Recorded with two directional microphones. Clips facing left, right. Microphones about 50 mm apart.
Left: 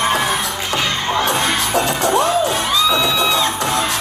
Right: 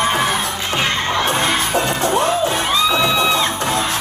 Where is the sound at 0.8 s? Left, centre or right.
Right.